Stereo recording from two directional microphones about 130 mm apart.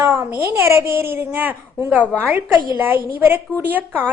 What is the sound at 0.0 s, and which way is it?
A woman's voice, 20° right (ahead or behind).